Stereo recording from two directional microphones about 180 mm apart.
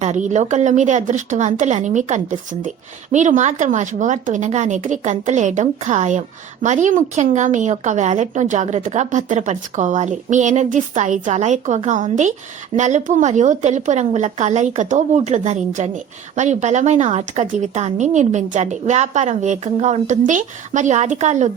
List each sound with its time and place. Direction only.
0.0 s a woman's voice: 40° right (ahead or behind)